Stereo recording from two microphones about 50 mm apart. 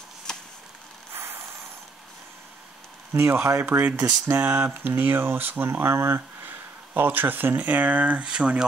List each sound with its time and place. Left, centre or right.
0.3 s a sound: centre
1.1 s vehicle: right
3.1 s speech: right
3.7 s speech: right
5.7 s speech: right
6.4 s speech: right; by 8.6 s centre